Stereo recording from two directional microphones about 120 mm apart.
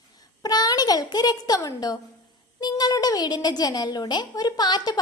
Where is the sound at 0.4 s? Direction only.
30° left (ahead or behind).